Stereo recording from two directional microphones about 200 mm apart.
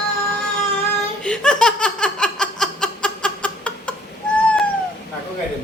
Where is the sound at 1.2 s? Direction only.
5° left (ahead or behind).